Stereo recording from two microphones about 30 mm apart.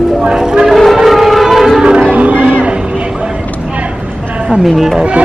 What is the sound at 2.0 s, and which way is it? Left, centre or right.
Music, right.